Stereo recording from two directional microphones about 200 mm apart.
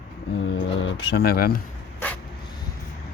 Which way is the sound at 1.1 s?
50° left (ahead or behind).